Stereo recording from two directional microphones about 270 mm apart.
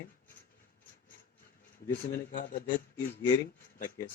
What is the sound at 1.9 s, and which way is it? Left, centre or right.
Speech, left.